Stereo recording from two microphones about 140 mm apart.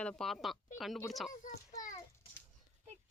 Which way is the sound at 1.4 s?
65° left (ahead or behind).